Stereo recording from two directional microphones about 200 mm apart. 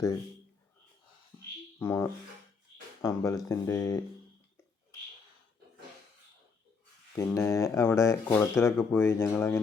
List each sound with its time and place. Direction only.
1.8 s speech: 15° left (ahead or behind)
7.2 s speech: 15° left (ahead or behind)